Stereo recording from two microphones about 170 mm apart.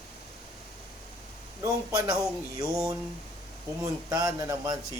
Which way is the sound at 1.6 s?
20° right (ahead or behind).